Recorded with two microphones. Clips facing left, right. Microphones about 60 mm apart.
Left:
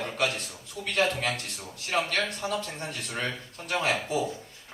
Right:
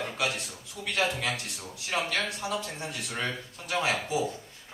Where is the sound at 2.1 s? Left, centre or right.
Left.